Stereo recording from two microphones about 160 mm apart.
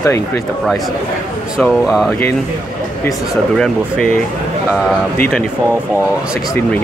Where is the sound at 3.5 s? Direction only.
5° left (ahead or behind).